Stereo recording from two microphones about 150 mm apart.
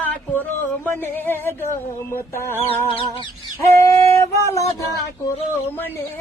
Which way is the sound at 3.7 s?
20° left (ahead or behind).